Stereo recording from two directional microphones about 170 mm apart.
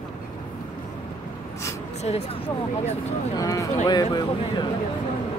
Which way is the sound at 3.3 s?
20° left (ahead or behind).